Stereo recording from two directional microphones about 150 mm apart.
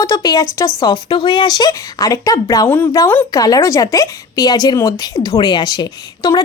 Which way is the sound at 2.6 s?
15° left (ahead or behind).